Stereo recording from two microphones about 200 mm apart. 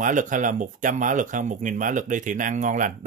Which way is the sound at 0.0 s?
40° right (ahead or behind).